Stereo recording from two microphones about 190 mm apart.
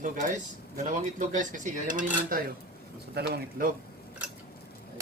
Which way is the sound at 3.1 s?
60° right (ahead or behind).